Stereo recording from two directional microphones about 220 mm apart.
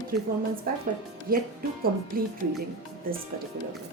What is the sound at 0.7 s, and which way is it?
A woman's voice, 40° right (ahead or behind).